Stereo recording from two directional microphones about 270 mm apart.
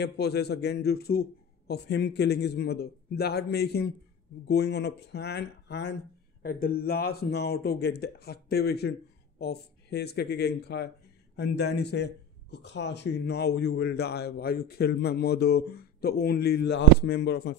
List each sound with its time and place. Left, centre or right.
0.0 s speech: left